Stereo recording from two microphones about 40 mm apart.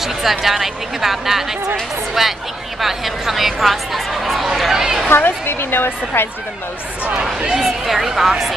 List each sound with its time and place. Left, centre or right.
0.0 s speech: centre
5.1 s speech: left
7.5 s speech: centre